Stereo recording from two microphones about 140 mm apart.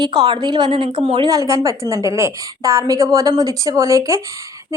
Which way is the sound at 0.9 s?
50° right (ahead or behind).